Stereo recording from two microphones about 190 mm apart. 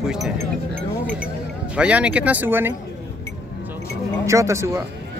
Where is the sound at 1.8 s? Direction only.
5° right (ahead or behind).